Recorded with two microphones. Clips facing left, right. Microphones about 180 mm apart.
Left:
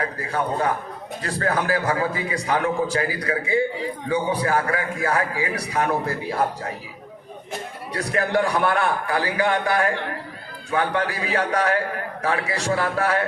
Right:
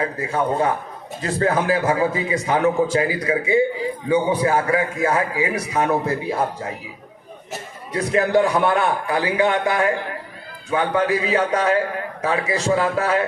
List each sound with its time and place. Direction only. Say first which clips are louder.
0.0 s a man's voice: right 3 dB; 25° right (ahead or behind)
7.9 s a man's voice: right 5 dB; 20° right (ahead or behind)